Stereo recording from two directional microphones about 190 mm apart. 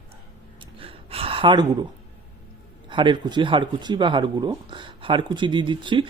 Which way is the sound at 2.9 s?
25° right (ahead or behind).